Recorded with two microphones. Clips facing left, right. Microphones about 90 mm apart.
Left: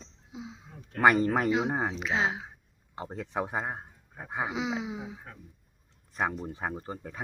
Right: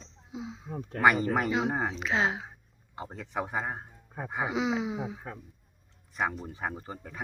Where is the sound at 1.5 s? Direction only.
15° left (ahead or behind).